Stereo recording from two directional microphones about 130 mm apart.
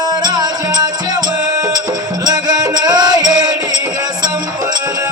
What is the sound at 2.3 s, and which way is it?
Music, 30° right (ahead or behind).